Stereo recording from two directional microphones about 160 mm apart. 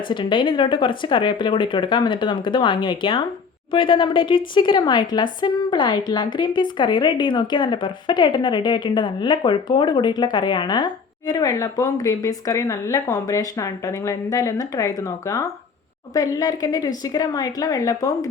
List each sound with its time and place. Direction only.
0.1 s a woman's voice: 30° left (ahead or behind)